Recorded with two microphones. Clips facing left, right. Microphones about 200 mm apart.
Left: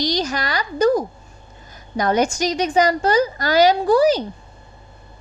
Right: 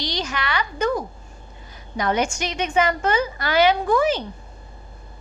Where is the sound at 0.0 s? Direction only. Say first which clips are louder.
Left 5 dB; 40° left (ahead or behind).